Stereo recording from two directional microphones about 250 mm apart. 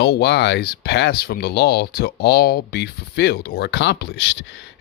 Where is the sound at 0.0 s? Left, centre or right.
Left.